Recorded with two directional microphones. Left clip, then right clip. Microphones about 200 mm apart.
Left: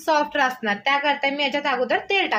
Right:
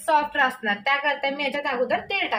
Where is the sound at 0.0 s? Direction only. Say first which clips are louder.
Left 1 dB; 50° left (ahead or behind).